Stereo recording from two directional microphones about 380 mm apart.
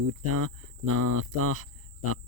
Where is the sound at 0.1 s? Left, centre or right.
Right.